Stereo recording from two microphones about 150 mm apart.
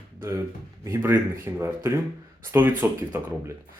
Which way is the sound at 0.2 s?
20° right (ahead or behind).